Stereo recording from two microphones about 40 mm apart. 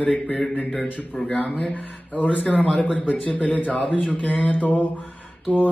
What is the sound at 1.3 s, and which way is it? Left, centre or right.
Speech, left.